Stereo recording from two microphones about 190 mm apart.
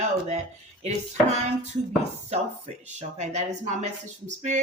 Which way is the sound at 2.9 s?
35° right (ahead or behind).